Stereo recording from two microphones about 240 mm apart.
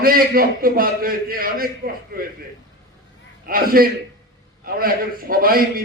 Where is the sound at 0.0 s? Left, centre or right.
Right.